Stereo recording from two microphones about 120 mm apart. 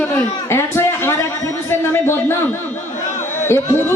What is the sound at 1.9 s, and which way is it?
Speech, 20° left (ahead or behind).